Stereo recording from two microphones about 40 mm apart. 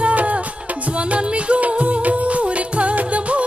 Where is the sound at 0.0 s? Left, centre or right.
Right.